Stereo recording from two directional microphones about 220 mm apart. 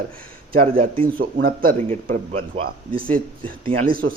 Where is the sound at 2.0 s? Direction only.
30° right (ahead or behind).